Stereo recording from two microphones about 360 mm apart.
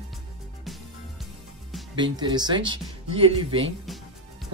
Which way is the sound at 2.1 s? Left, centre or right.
Centre.